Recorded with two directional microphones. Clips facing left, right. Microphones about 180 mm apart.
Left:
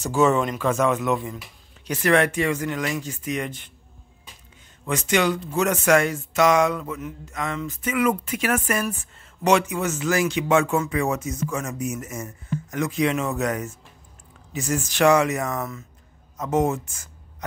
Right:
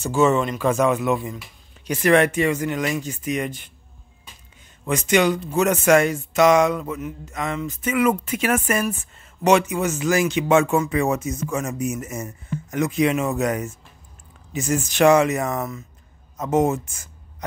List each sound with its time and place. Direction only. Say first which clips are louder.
0.0 s speech: right 1 dB; centre (ahead or behind)
0.6 s speech: right 2 dB; 15° right (ahead or behind)
4.8 s speech: right 3 dB; 15° right (ahead or behind)
7.0 s speech: right 3 dB; 10° right (ahead or behind)
7.3 s speech: right 2 dB; 20° right (ahead or behind)